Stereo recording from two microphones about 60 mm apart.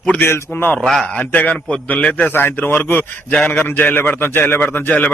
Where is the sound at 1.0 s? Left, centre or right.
Left.